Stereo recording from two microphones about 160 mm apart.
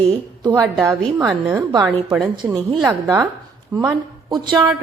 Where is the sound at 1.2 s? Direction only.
10° right (ahead or behind).